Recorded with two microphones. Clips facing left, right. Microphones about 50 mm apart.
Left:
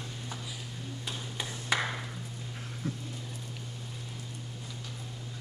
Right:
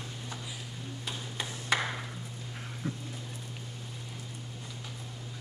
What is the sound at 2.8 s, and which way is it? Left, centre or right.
Dog, right.